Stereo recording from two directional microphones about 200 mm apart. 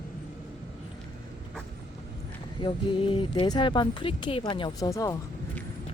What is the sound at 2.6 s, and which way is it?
Speech, 25° left (ahead or behind).